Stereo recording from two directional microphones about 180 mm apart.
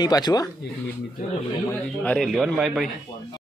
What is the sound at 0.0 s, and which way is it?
Speech, 25° left (ahead or behind).